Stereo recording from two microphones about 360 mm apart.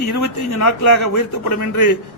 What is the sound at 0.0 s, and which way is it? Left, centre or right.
A man's voice, left.